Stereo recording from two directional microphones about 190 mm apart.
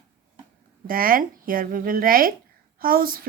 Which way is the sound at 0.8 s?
50° right (ahead or behind).